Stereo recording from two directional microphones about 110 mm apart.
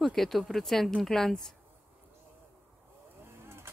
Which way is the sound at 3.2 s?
20° right (ahead or behind).